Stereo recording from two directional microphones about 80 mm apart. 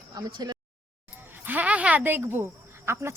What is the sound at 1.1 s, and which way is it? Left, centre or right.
Speech, right.